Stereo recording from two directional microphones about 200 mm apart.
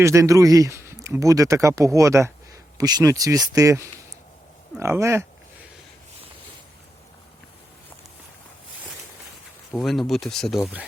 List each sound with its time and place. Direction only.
0.0 s speech: 15° right (ahead or behind)
9.7 s speech: centre (ahead or behind)